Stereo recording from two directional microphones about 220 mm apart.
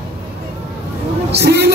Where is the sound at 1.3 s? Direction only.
50° right (ahead or behind).